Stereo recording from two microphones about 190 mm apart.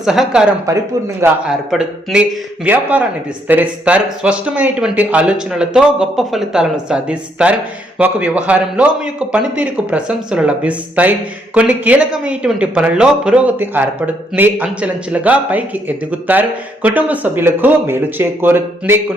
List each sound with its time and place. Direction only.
0.0 s speech: 5° right (ahead or behind)
0.6 s speech: 15° right (ahead or behind)
1.5 s speech: centre (ahead or behind)